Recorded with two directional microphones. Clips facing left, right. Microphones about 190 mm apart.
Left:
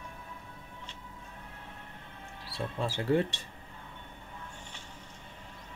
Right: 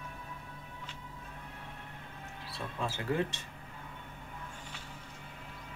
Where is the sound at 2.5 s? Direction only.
35° left (ahead or behind).